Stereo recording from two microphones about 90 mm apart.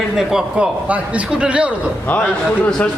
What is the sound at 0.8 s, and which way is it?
Speech, 15° right (ahead or behind).